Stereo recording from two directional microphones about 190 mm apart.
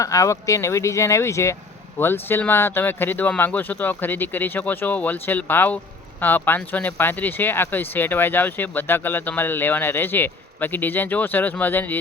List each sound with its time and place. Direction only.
0.0 s speech: 15° left (ahead or behind)